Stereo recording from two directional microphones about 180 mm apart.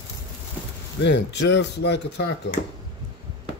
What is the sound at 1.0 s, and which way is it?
Speech, 75° left (ahead or behind).